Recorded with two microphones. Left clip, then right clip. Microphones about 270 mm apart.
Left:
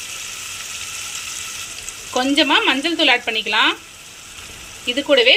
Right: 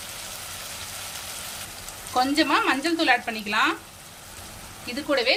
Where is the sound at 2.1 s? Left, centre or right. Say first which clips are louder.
Left 5 dB; centre.